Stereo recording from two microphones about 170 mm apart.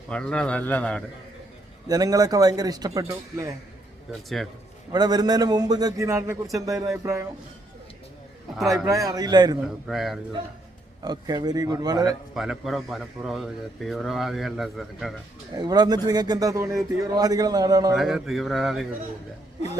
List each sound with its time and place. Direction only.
0.1 s a man's voice: 5° left (ahead or behind)
1.9 s a man's voice: 20° right (ahead or behind)
4.9 s a man's voice: 25° right (ahead or behind)
8.9 s a man's voice: 20° right (ahead or behind)
9.6 s speech: centre (ahead or behind)
11.0 s a man's voice: 25° right (ahead or behind)
12.3 s speech: centre (ahead or behind)
15.5 s a man's voice: 25° right (ahead or behind)
17.9 s speech: centre (ahead or behind)